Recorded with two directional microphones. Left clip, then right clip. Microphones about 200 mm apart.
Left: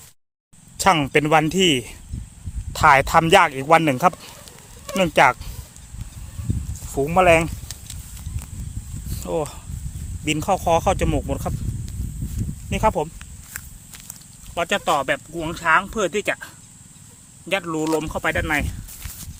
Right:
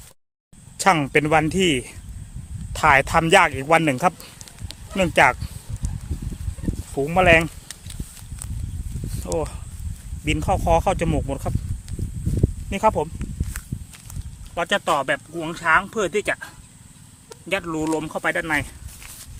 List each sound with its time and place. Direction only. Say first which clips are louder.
0.8 s speech: left 1 dB; 15° left (ahead or behind)
6.9 s speech: left 1 dB; 20° left (ahead or behind)
9.1 s speech: left 1 dB; 20° left (ahead or behind)
12.7 s speech: even; 10° left (ahead or behind)
17.5 s speech: left 2 dB; 10° left (ahead or behind)